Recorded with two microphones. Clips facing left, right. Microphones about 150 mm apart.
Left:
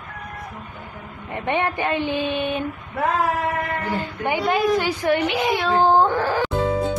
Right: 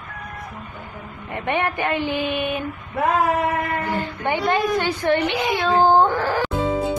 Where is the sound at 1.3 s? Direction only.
20° left (ahead or behind).